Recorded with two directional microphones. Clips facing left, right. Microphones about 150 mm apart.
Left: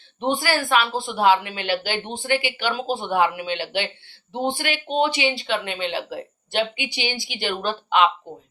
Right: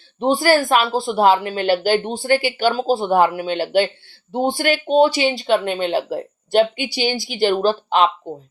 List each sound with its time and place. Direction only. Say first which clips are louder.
0.2 s a woman's voice: right 7 dB; 35° right (ahead or behind)